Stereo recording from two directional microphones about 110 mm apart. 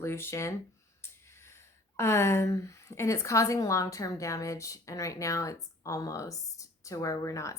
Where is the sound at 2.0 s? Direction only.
25° left (ahead or behind).